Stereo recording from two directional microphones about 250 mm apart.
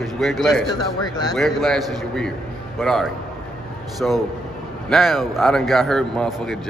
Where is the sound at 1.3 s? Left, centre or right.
Centre.